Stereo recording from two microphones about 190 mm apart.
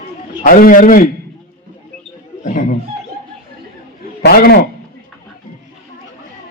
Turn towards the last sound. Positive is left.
turn(degrees=55)  # may be behind; listen again after turning